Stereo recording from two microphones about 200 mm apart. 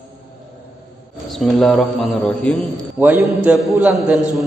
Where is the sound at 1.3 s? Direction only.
Centre (ahead or behind).